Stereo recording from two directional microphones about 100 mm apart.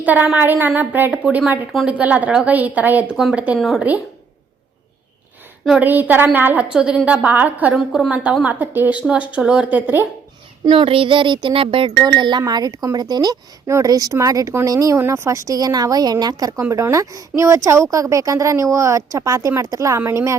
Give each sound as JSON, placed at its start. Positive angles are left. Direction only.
{"t": 0.0, "sound": "a woman's voice", "side_deg": -15}
{"t": 3.6, "sound": "a woman's voice", "side_deg": 0}
{"t": 5.8, "sound": "a woman's voice", "side_deg": -20}
{"t": 10.7, "sound": "child singing", "side_deg": -65}
{"t": 12.0, "sound": "a woman's voice", "side_deg": -50}